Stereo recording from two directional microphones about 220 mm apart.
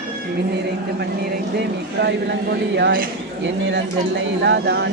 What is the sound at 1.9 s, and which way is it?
A man's voice, 50° right (ahead or behind).